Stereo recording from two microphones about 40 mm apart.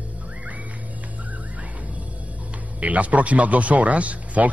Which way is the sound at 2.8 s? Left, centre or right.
Right.